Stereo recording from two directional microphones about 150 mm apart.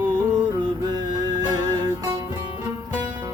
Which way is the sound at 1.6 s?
30° right (ahead or behind).